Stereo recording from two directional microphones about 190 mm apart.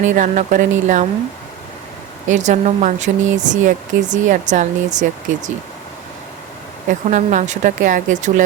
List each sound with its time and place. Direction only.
0.0 s speech: 40° right (ahead or behind)
2.2 s speech: 40° right (ahead or behind)
6.8 s speech: 40° right (ahead or behind)